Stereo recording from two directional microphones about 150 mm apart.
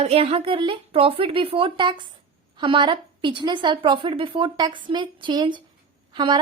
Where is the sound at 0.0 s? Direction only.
40° right (ahead or behind).